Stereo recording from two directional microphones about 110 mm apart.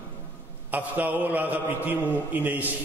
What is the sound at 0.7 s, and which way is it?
A man's voice, 15° right (ahead or behind).